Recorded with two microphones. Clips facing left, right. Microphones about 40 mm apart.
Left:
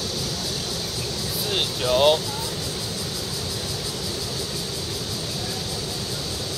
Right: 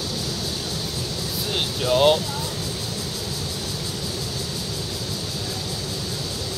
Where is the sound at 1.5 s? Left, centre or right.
Centre.